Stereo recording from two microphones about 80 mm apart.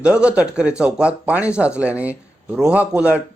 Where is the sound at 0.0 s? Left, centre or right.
Centre.